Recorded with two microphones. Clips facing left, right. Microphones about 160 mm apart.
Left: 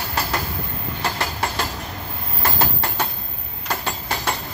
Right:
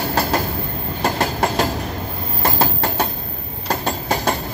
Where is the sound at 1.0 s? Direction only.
50° right (ahead or behind).